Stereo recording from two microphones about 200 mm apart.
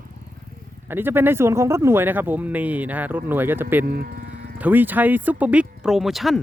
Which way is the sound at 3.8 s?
50° right (ahead or behind).